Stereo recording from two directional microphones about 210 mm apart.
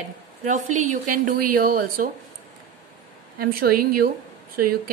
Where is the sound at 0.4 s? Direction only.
35° right (ahead or behind).